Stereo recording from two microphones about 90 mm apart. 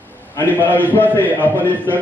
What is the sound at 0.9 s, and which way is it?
A man's voice, 20° left (ahead or behind).